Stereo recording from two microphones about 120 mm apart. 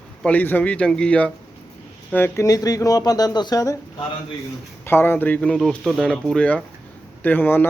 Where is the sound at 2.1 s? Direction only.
20° left (ahead or behind).